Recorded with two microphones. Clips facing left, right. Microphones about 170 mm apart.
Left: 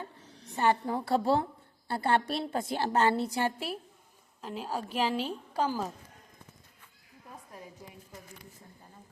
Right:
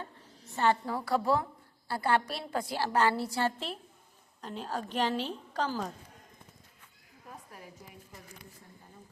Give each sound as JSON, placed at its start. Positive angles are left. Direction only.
{"t": 0.5, "sound": "a woman's voice", "side_deg": 15}